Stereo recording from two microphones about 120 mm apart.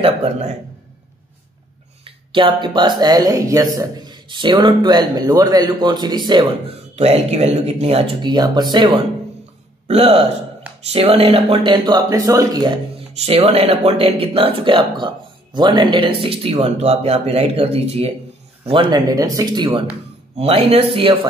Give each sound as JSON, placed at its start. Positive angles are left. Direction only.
{"t": 2.0, "sound": "speech", "side_deg": -45}
{"t": 6.7, "sound": "speech", "side_deg": -60}
{"t": 8.2, "sound": "speech", "side_deg": -35}
{"t": 9.8, "sound": "speech", "side_deg": -55}
{"t": 13.2, "sound": "speech", "side_deg": -60}
{"t": 18.7, "sound": "speech", "side_deg": -40}
{"t": 20.3, "sound": "speech", "side_deg": -55}